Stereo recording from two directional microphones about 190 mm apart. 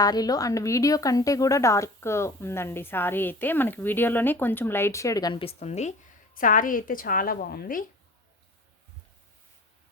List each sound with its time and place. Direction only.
0.0 s speech: 20° left (ahead or behind); by 7.9 s 50° left (ahead or behind)